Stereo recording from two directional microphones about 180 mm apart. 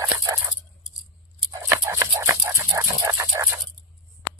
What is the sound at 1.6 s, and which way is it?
Dog, 15° right (ahead or behind).